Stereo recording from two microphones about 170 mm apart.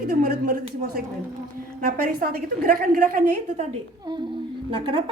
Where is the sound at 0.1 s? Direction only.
60° right (ahead or behind).